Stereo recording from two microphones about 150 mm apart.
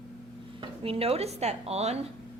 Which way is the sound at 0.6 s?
40° right (ahead or behind).